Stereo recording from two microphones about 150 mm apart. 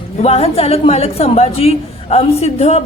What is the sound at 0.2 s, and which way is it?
A woman's voice, 45° left (ahead or behind).